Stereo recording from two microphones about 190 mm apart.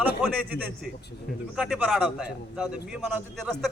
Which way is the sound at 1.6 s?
5° right (ahead or behind).